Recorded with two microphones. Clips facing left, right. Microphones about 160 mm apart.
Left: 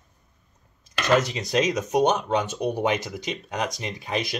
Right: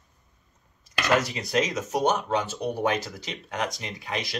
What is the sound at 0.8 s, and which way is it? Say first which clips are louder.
Speech: left 3 dB; 20° left (ahead or behind).